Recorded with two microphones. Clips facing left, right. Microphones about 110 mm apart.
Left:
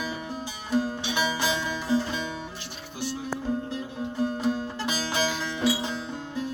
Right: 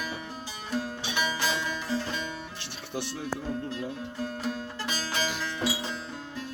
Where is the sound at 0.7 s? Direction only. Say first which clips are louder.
Left 6 dB; 15° left (ahead or behind).